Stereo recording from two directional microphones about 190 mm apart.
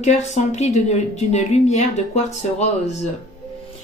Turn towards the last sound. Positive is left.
turn(degrees=35)  # may be behind; listen again after turning